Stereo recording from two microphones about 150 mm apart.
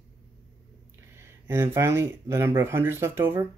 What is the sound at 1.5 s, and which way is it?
Speech, 15° right (ahead or behind).